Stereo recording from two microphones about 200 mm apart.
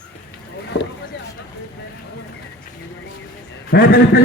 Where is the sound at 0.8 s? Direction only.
55° left (ahead or behind).